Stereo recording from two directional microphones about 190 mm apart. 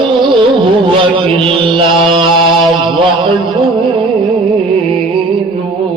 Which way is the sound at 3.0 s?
25° right (ahead or behind).